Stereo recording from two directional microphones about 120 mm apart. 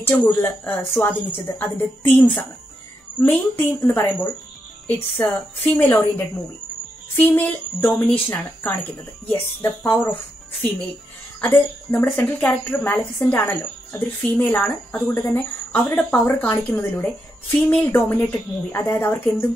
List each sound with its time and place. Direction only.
0.2 s a woman's voice: 15° left (ahead or behind)
11.4 s a woman's voice: 15° left (ahead or behind)
16.9 s speech: 5° left (ahead or behind)
17.6 s a woman's voice: 20° left (ahead or behind)